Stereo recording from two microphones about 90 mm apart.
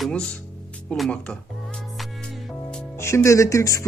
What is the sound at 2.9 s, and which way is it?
Speech, 30° left (ahead or behind).